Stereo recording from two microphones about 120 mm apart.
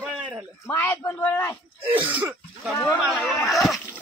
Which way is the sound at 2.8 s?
Centre (ahead or behind).